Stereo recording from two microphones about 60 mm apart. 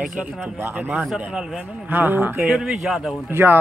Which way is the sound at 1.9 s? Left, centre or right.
Right.